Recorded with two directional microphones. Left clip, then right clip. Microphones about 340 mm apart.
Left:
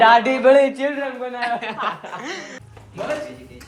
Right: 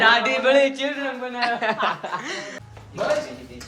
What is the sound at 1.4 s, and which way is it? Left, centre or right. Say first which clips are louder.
A man's voice: right 2 dB; centre.